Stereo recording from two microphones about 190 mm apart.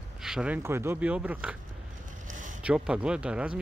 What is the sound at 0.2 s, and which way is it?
Speech, 5° right (ahead or behind).